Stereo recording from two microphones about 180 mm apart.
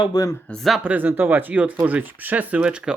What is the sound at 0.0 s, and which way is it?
Speech, 20° left (ahead or behind).